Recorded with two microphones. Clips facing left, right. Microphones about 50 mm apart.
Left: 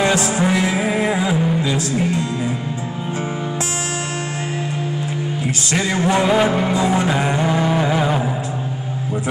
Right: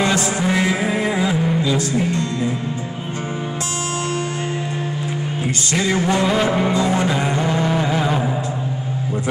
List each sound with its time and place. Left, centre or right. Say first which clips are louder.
0.0 s music: left 2 dB; centre
5.9 s music: even; centre
6.1 s music: left 5 dB; centre